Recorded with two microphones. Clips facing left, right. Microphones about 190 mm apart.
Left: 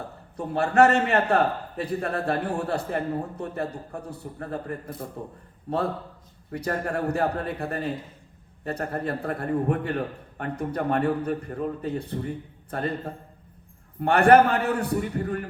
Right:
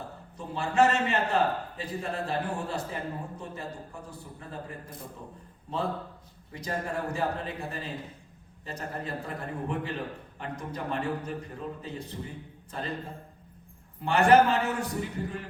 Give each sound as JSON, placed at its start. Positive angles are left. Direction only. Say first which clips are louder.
{"t": 0.3, "sound": "a man's voice", "louder": "left 5 dB", "side_deg": 65}
{"t": 6.5, "sound": "a man's voice", "louder": "left 5 dB", "side_deg": 65}